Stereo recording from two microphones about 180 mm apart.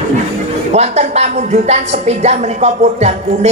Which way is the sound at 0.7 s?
35° right (ahead or behind).